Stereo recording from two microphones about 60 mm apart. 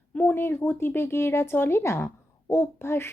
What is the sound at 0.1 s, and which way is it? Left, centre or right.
A woman's voice, left.